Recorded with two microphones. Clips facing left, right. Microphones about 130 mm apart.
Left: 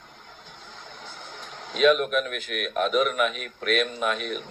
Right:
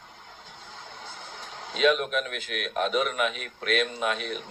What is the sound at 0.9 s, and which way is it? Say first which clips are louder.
Speech: left 1 dB; 55° left (ahead or behind).